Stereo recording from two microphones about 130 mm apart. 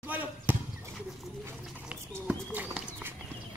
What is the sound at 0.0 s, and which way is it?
Basketball bounce, 15° right (ahead or behind).